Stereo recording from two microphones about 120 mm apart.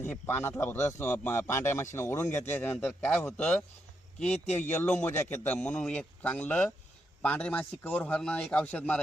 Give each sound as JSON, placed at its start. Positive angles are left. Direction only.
{"t": 0.0, "sound": "a man's voice", "side_deg": 15}